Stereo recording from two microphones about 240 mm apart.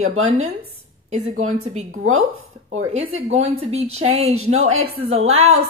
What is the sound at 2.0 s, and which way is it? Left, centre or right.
Speech, right.